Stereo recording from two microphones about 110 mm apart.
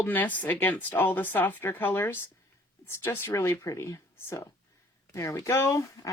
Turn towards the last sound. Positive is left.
turn(degrees=25)  # may be behind; listen again after turning